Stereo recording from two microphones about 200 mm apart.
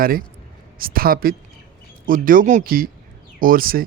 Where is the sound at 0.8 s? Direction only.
45° right (ahead or behind).